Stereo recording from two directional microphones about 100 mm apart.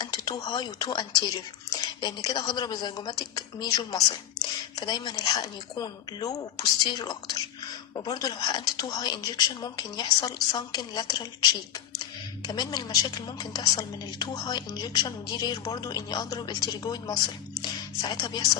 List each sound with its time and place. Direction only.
0.0 s a woman's voice: 45° left (ahead or behind)